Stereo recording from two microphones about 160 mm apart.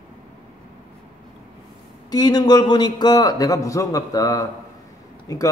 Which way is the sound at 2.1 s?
25° left (ahead or behind).